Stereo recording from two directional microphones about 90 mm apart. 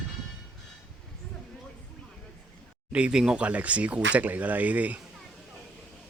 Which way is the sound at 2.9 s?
10° right (ahead or behind).